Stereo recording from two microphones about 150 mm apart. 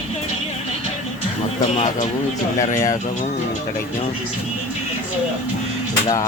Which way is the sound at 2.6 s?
20° left (ahead or behind).